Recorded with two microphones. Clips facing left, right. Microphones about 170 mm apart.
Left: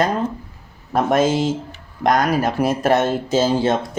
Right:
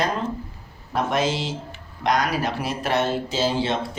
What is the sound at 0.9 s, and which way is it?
Speech, 50° left (ahead or behind).